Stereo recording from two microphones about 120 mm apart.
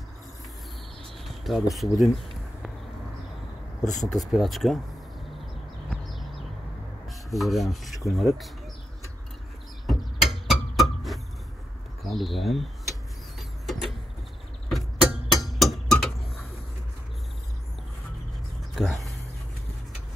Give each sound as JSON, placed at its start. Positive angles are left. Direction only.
{"t": 1.2, "sound": "speech", "side_deg": 0}
{"t": 3.8, "sound": "speech", "side_deg": 90}
{"t": 4.1, "sound": "speech", "side_deg": 0}
{"t": 7.1, "sound": "rub", "side_deg": 0}
{"t": 9.8, "sound": "a sound", "side_deg": 0}
{"t": 12.0, "sound": "speech", "side_deg": 0}
{"t": 13.4, "sound": "vehicle", "side_deg": 0}
{"t": 14.7, "sound": "a sound", "side_deg": 0}
{"t": 18.8, "sound": "a sound", "side_deg": 0}